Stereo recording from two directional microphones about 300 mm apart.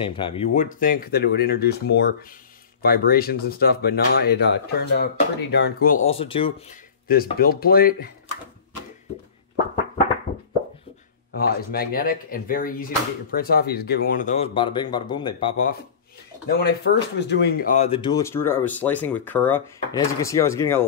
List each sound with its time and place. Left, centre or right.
0.0 s speech: centre
7.1 s speech: left
11.3 s speech: left
16.5 s speech: left; by 20.8 s centre